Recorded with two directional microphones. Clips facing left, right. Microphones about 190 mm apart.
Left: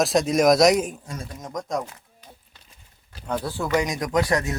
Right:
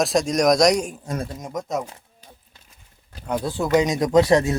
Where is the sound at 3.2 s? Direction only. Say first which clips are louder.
Right 3 dB; 15° right (ahead or behind).